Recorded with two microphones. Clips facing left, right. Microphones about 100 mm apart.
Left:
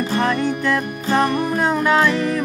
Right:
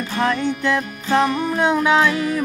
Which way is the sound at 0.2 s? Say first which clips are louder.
Right 3 dB; centre (ahead or behind).